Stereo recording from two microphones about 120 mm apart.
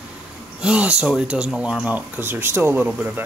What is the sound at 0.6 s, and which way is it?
Speech, 10° right (ahead or behind).